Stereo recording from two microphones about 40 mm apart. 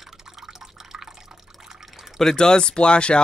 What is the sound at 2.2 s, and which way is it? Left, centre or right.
Speech, centre.